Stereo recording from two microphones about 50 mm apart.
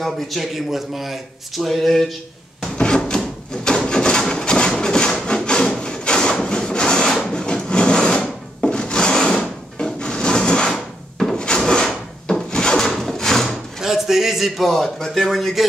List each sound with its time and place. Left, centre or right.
0.0 s a man's voice: centre
2.8 s drawer open or close: centre
3.6 s wood: centre
9.9 s a sound: centre
10.7 s drawer open or close: centre
11.3 s wood: centre
12.4 s drawer open or close: centre
12.8 s wood: centre
13.7 s a man's voice: centre